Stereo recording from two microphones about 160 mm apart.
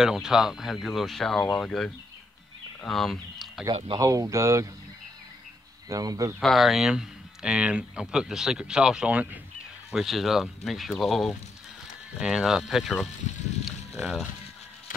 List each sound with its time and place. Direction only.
0.0 s speech: 5° right (ahead or behind)
3.7 s speech: 35° right (ahead or behind)
4.0 s speech: 20° right (ahead or behind)
5.9 s speech: 20° right (ahead or behind)
6.4 s speech: centre (ahead or behind)
13.7 s a sound: 5° right (ahead or behind)